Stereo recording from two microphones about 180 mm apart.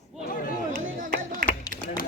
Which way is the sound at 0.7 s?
50° right (ahead or behind).